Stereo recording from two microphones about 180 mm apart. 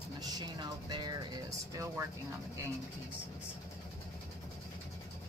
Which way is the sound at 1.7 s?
20° right (ahead or behind).